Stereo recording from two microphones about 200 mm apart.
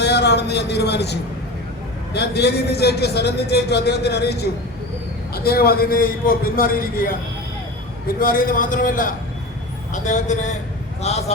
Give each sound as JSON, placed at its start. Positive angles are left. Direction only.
{"t": 0.0, "sound": "a man's voice", "side_deg": 55}